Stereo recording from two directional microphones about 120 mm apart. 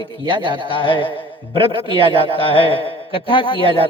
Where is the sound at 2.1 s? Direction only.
50° left (ahead or behind).